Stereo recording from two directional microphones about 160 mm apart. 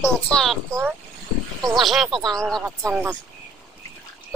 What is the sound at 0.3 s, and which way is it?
Speech, 5° left (ahead or behind).